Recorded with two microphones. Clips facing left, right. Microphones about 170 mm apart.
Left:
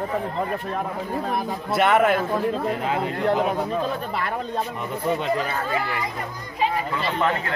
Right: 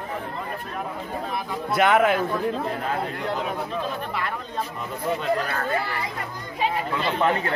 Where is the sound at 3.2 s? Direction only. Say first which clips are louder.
Left 6 dB; 50° left (ahead or behind).